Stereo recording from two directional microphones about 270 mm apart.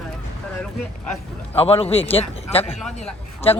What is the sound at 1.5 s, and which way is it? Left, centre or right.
A man's voice, left.